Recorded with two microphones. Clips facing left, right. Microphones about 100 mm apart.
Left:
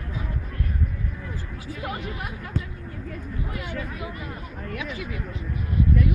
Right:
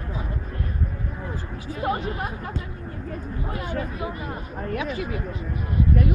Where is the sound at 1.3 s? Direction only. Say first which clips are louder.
Right 3 dB; 35° right (ahead or behind).